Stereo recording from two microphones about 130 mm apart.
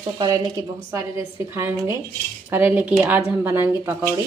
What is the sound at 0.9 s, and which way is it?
A woman's voice, 20° right (ahead or behind).